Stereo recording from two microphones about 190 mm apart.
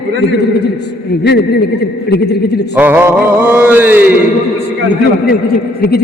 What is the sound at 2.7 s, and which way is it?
A man's voice, 10° right (ahead or behind).